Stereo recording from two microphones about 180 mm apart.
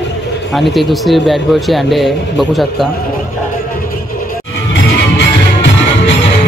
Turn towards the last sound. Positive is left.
turn(degrees=80)